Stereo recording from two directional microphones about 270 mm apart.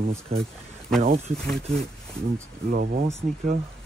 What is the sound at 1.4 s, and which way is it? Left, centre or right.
Speech, centre.